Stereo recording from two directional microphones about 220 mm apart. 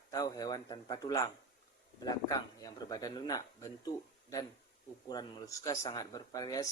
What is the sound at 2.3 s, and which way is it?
Speech, 15° left (ahead or behind).